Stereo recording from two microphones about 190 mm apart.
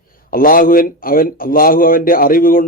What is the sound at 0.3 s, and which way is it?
A man's voice, 50° left (ahead or behind).